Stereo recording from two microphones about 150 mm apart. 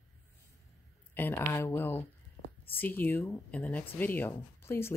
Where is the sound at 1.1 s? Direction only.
15° left (ahead or behind).